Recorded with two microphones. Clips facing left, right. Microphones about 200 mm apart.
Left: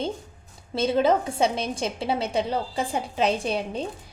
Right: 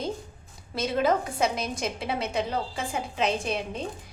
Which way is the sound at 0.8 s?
30° left (ahead or behind).